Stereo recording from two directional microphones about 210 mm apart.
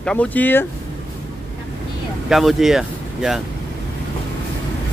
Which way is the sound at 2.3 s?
Centre (ahead or behind).